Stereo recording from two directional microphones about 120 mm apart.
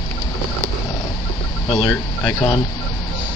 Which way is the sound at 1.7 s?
40° left (ahead or behind).